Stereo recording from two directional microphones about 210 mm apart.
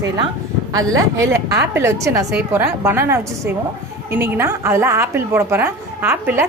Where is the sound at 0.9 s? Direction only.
15° right (ahead or behind).